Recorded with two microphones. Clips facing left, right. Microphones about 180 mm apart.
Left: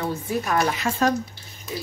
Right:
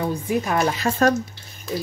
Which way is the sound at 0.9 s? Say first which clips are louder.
Right 3 dB; 40° right (ahead or behind).